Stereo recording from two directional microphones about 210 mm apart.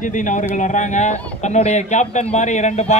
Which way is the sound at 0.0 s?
35° left (ahead or behind).